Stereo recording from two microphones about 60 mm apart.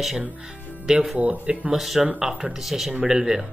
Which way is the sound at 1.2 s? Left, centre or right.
Right.